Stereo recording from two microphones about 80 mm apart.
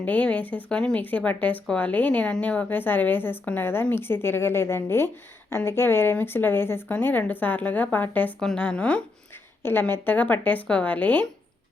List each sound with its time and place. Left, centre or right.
0.0 s a woman's voice: centre
8.4 s a woman's voice: centre
9.6 s a woman's voice: left